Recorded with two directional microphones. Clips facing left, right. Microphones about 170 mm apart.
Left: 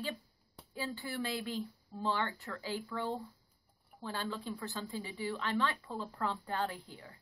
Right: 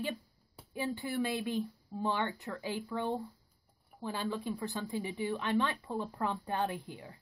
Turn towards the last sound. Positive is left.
turn(degrees=-20)  # may be behind; listen again after turning